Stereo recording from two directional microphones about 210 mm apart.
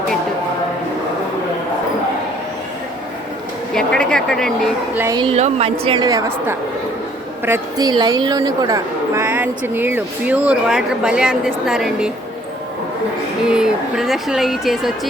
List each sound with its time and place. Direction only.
3.8 s speech: 5° left (ahead or behind)
4.9 s a woman's voice: 15° right (ahead or behind)
5.2 s a woman's voice: 30° right (ahead or behind); by 12.1 s 5° right (ahead or behind)
13.5 s speech: 5° right (ahead or behind)